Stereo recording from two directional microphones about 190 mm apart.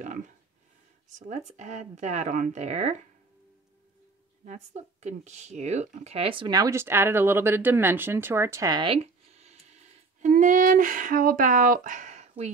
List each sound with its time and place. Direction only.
1.0 s speech: 40° right (ahead or behind)
4.5 s speech: 40° right (ahead or behind)